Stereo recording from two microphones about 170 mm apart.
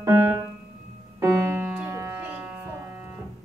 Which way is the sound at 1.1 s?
10° right (ahead or behind).